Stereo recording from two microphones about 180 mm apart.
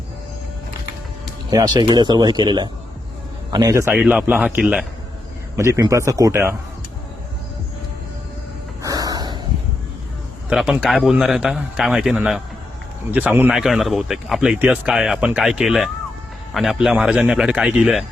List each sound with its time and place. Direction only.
1.5 s a man's voice: 20° right (ahead or behind)
8.8 s snort: 20° right (ahead or behind)
10.5 s speech: 5° right (ahead or behind)